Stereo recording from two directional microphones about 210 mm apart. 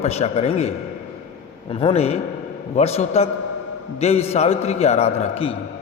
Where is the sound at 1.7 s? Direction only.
30° left (ahead or behind).